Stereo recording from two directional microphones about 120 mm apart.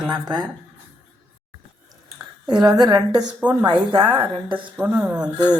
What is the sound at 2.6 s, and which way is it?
Speech, 35° right (ahead or behind).